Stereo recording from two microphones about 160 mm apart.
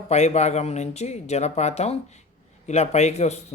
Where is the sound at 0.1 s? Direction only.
45° left (ahead or behind).